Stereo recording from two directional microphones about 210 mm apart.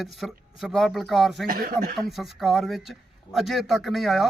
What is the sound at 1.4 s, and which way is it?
Speech, 45° right (ahead or behind).